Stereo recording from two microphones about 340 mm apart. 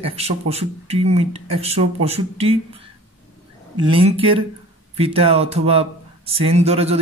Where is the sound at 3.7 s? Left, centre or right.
Centre.